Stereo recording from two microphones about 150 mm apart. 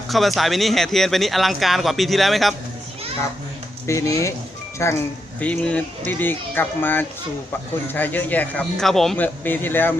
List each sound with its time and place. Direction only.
0.1 s speech: centre (ahead or behind)
3.8 s a man's voice: 20° left (ahead or behind); by 9.1 s centre (ahead or behind)
9.1 s a man's voice: 10° left (ahead or behind)